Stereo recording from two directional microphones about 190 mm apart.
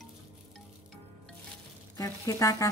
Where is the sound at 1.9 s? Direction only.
15° left (ahead or behind).